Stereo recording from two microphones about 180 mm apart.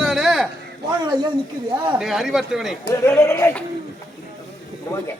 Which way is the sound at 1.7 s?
25° right (ahead or behind).